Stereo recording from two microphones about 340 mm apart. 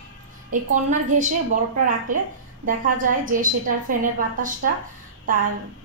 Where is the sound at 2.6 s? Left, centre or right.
Right.